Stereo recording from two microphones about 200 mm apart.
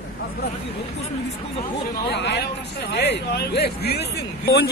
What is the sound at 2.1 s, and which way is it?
Speech, 55° left (ahead or behind).